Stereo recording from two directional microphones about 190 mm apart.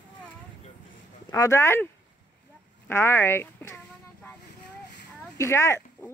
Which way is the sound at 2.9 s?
15° left (ahead or behind).